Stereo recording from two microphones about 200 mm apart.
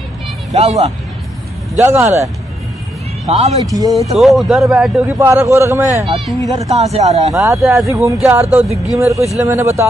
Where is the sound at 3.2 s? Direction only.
30° right (ahead or behind).